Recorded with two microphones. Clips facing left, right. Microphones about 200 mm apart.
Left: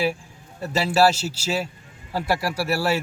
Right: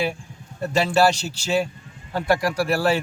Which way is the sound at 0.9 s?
5° left (ahead or behind).